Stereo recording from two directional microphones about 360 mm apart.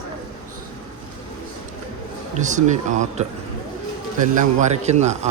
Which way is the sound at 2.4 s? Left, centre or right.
Centre.